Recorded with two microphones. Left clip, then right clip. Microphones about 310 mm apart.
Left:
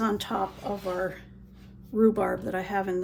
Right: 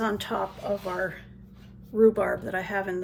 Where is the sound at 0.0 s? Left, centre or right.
Centre.